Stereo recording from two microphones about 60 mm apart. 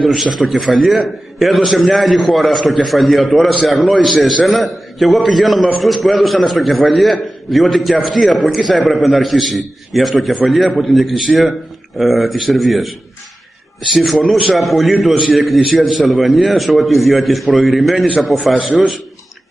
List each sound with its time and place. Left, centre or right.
0.0 s a man's voice: centre
13.9 s a man's voice: centre